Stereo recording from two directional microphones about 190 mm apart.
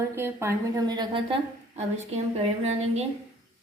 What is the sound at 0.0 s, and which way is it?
A woman's voice, 15° right (ahead or behind).